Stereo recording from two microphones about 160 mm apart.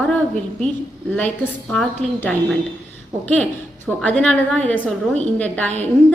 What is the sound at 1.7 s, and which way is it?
A woman's voice, 5° left (ahead or behind).